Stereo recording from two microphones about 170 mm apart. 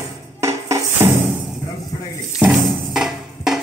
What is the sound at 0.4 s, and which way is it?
Music, 15° right (ahead or behind).